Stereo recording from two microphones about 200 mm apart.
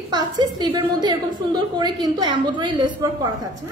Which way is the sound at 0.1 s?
20° right (ahead or behind).